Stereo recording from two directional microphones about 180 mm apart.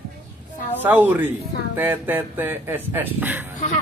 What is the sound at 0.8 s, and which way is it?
Speech, 10° right (ahead or behind).